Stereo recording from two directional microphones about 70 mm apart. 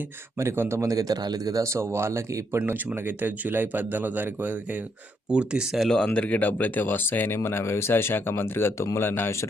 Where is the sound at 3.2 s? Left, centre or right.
Right.